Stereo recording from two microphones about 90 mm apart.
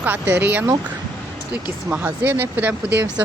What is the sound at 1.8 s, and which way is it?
Speech, 20° right (ahead or behind).